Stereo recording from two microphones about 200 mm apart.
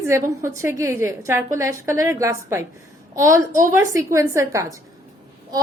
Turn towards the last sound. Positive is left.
turn(degrees=-15)  # may be behind; listen again after turning